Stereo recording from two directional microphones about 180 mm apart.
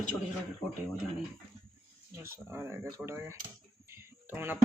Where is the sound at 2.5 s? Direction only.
15° right (ahead or behind).